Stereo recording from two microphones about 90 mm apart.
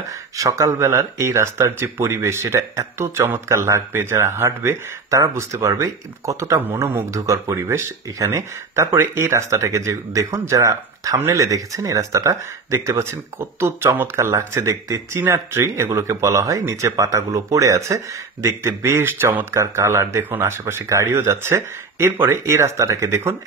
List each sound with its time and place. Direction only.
0.4 s speech: 35° right (ahead or behind)